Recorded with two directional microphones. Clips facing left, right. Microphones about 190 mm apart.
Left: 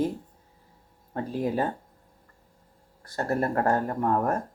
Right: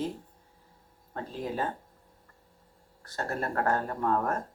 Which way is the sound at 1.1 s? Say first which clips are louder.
Left 6 dB; 15° left (ahead or behind).